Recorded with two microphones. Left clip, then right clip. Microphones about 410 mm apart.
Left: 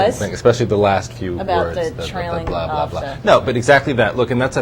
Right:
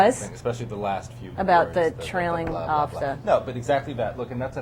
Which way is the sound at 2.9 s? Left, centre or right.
Left.